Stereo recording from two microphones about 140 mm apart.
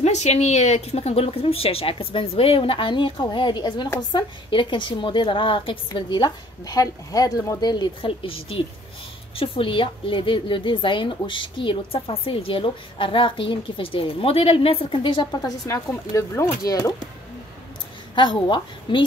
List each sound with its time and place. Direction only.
0.0 s a woman's voice: 55° left (ahead or behind); by 16.9 s 25° left (ahead or behind)
18.1 s a woman's voice: 35° left (ahead or behind)